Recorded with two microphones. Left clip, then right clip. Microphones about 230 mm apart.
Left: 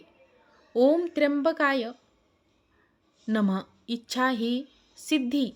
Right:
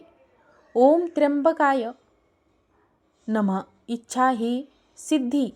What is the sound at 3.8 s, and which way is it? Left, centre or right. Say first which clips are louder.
Speech: right 5 dB; left.